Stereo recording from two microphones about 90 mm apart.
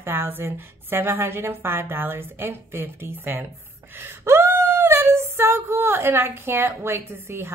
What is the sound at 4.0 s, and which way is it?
Female singing, 25° right (ahead or behind).